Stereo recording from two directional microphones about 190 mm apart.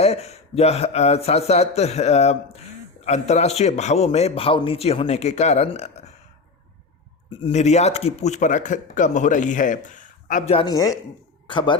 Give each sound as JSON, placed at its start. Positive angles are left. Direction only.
{"t": 0.0, "sound": "a man's voice", "side_deg": 35}
{"t": 7.4, "sound": "a man's voice", "side_deg": 35}
{"t": 10.5, "sound": "speech", "side_deg": 30}